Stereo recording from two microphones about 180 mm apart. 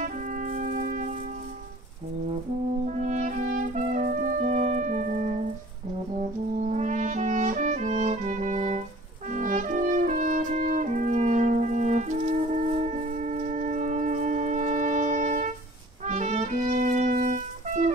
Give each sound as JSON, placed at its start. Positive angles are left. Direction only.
{"t": 0.0, "sound": "music", "side_deg": -45}
{"t": 3.0, "sound": "music", "side_deg": -40}
{"t": 6.7, "sound": "brass instrument", "side_deg": -45}
{"t": 16.1, "sound": "music", "side_deg": -40}